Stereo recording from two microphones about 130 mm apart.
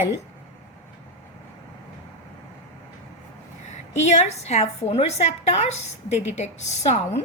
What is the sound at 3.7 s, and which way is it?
A woman's voice, 60° left (ahead or behind).